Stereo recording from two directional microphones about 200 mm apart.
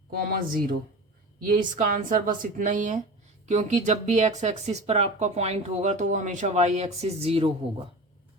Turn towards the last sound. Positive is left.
turn(degrees=-30)  # may be behind; listen again after turning